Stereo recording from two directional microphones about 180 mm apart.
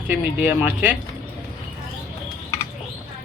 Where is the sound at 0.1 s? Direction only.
10° right (ahead or behind).